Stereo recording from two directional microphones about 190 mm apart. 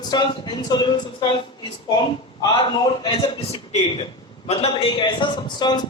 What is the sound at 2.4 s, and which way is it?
A man's voice, 25° left (ahead or behind).